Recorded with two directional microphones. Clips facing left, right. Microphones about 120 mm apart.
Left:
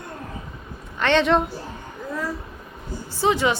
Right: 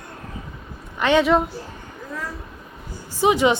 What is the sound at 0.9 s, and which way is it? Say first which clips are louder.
Speech: right 2 dB; 10° right (ahead or behind).